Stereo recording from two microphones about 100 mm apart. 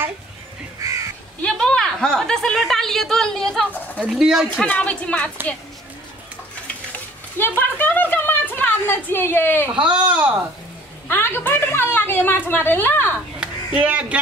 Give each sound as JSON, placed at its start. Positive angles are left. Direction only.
{"t": 1.4, "sound": "a woman's voice", "side_deg": 10}
{"t": 4.6, "sound": "a woman's voice", "side_deg": 15}
{"t": 7.3, "sound": "a sound", "side_deg": 20}
{"t": 9.8, "sound": "speech", "side_deg": -10}
{"t": 11.1, "sound": "a woman's voice", "side_deg": 20}
{"t": 13.4, "sound": "a sound", "side_deg": -10}